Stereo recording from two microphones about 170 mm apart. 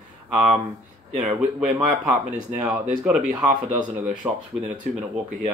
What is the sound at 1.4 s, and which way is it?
Speech, 5° right (ahead or behind).